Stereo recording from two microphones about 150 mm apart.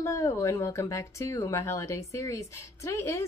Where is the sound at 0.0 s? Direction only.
20° left (ahead or behind).